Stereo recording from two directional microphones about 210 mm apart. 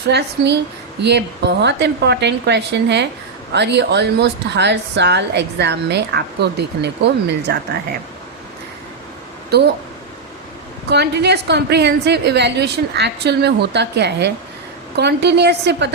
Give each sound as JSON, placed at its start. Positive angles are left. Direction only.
{"t": 0.1, "sound": "a woman's voice", "side_deg": -55}
{"t": 9.5, "sound": "a woman's voice", "side_deg": -50}
{"t": 10.8, "sound": "a woman's voice", "side_deg": -50}